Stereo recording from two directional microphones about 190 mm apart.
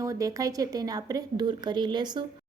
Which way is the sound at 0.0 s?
15° right (ahead or behind).